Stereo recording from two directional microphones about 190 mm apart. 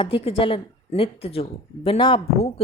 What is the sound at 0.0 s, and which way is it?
A woman's voice, 30° left (ahead or behind).